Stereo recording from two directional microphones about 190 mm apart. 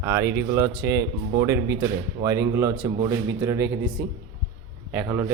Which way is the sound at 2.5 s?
15° right (ahead or behind).